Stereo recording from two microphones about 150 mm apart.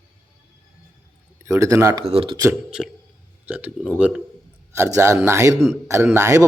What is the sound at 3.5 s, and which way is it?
Speech, 10° right (ahead or behind).